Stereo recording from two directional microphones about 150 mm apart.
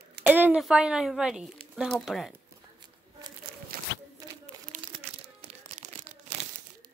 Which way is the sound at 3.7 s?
75° right (ahead or behind).